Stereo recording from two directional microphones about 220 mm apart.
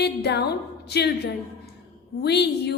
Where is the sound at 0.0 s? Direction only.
50° left (ahead or behind).